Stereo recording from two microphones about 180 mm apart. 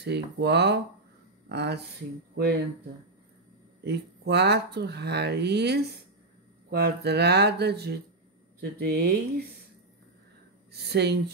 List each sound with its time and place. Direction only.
0.0 s speech: 70° right (ahead or behind)
3.8 s speech: 65° right (ahead or behind)
10.7 s speech: 65° right (ahead or behind)